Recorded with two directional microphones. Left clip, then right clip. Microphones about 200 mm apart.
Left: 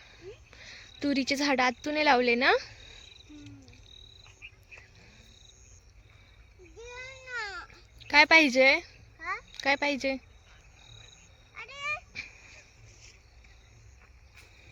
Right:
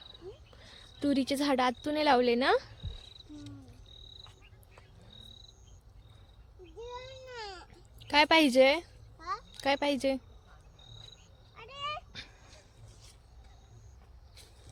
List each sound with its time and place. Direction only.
0.5 s a woman's voice: centre (ahead or behind)
4.2 s frog: centre (ahead or behind)
7.3 s babbling: 20° left (ahead or behind)
7.9 s speech: centre (ahead or behind)
11.5 s cat: 20° left (ahead or behind)